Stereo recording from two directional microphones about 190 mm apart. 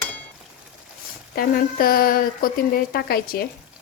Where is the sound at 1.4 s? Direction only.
50° left (ahead or behind).